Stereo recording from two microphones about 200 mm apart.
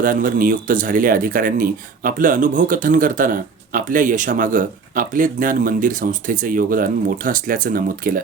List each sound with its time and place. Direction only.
0.0 s speech: 45° right (ahead or behind)